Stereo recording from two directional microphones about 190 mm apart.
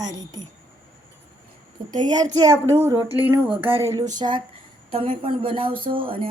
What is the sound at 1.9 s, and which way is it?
A woman's voice, 20° right (ahead or behind).